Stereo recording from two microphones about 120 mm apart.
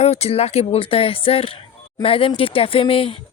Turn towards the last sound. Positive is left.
turn(degrees=50)  # may be behind; listen again after turning